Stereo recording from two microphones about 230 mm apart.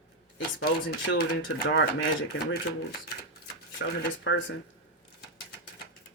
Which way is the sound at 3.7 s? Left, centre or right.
Left.